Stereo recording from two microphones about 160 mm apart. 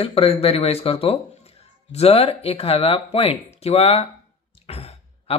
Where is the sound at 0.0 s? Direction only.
40° left (ahead or behind).